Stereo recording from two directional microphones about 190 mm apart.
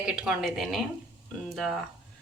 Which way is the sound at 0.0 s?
Centre (ahead or behind).